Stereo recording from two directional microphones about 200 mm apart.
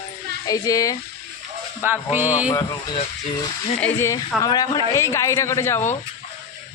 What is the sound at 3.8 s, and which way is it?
A man's voice, 10° left (ahead or behind).